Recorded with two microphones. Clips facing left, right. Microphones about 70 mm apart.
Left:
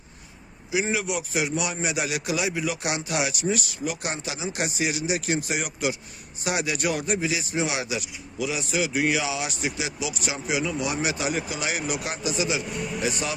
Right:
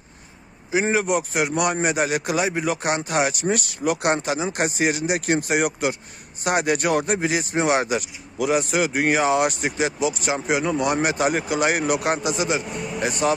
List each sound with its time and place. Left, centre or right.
0.7 s speech: right